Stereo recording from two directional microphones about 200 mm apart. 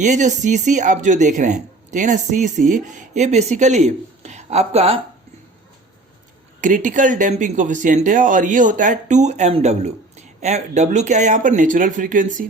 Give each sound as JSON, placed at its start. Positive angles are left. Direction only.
{"t": 0.0, "sound": "speech", "side_deg": -35}
{"t": 6.6, "sound": "speech", "side_deg": -40}